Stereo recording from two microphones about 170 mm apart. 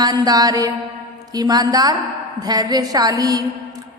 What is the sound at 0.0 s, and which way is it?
A woman's voice, 25° right (ahead or behind).